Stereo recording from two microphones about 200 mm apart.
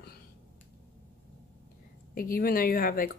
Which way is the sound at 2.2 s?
45° left (ahead or behind).